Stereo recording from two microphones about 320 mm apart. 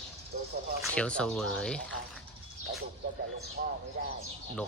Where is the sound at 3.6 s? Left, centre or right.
Right.